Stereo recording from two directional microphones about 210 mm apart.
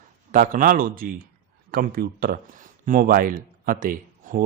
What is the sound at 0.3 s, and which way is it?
Speech, 40° right (ahead or behind).